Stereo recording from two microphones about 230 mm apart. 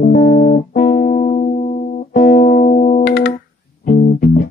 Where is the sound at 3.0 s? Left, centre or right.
Left.